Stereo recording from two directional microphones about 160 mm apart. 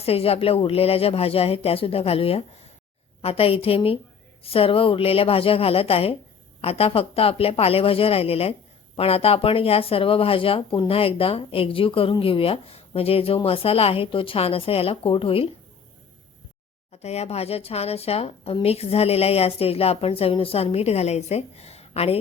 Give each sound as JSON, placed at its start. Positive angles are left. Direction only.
{"t": 0.0, "sound": "speech", "side_deg": 40}
{"t": 16.9, "sound": "speech", "side_deg": 40}